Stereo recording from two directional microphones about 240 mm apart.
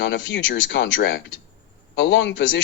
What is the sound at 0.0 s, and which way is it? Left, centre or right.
A man's voice, left.